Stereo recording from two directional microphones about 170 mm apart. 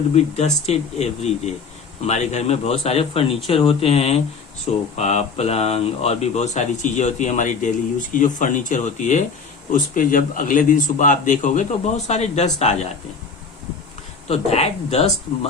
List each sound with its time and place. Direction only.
0.1 s speech: 40° left (ahead or behind)
14.3 s speech: 35° left (ahead or behind)